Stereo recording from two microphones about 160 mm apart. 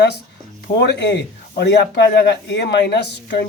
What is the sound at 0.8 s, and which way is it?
Speech, 90° left.